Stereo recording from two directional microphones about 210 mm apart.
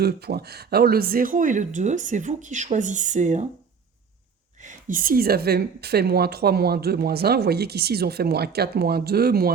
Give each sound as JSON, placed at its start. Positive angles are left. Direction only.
{"t": 0.0, "sound": "speech", "side_deg": -45}
{"t": 4.6, "sound": "a woman's voice", "side_deg": -40}